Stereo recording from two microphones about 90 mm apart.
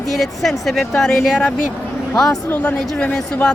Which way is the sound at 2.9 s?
10° left (ahead or behind).